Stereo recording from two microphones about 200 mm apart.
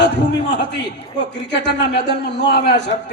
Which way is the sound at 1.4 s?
60° left (ahead or behind).